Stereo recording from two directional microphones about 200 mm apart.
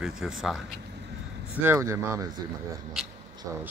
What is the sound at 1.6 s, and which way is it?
Speech, 15° right (ahead or behind).